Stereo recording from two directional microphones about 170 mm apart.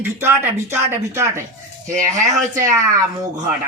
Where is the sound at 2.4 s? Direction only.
50° right (ahead or behind).